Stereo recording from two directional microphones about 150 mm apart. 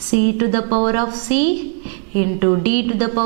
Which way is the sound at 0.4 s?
5° right (ahead or behind).